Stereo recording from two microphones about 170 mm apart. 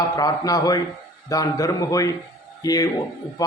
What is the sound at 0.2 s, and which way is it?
A man's voice, 20° left (ahead or behind).